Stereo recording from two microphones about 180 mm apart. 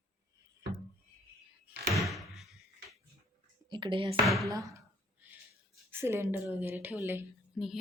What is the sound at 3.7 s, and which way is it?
Speech, 25° right (ahead or behind).